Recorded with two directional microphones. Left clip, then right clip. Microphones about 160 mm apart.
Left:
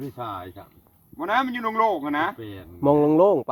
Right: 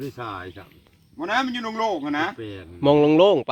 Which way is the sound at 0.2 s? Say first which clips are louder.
Even; 25° left (ahead or behind).